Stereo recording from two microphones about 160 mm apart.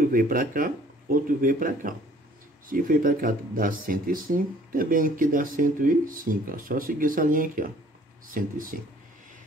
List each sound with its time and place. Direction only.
0.0 s speech: 65° right (ahead or behind)